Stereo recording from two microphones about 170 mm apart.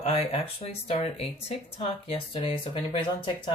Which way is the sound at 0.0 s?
40° left (ahead or behind).